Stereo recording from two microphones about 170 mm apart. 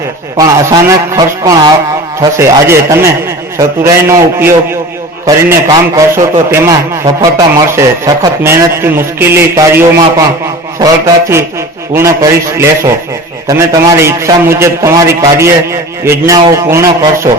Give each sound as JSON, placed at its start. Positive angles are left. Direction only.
{"t": 0.3, "sound": "a man's voice", "side_deg": -20}